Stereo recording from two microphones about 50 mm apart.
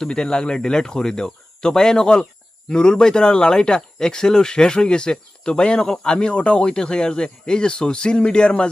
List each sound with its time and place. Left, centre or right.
0.0 s speech: centre